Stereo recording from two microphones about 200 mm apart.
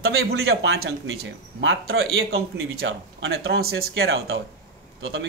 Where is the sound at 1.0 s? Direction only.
70° right (ahead or behind).